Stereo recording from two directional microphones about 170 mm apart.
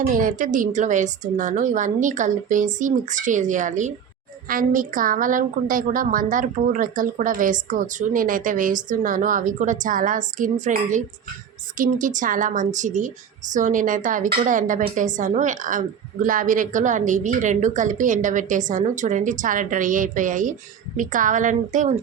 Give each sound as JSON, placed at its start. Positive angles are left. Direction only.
{"t": 0.0, "sound": "a woman's voice", "side_deg": -50}